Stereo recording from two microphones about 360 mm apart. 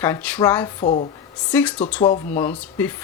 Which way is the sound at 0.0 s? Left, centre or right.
Centre.